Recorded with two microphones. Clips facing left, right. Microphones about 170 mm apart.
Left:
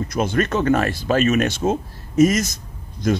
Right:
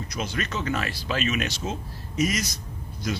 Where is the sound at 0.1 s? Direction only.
50° left (ahead or behind).